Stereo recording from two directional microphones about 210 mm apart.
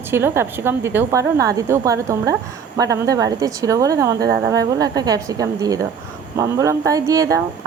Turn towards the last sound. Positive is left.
turn(degrees=-15)  # may be behind; listen again after turning